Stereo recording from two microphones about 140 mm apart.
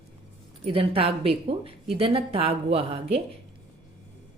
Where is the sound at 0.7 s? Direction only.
40° right (ahead or behind).